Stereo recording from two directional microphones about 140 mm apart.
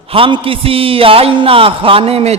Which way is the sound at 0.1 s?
40° right (ahead or behind).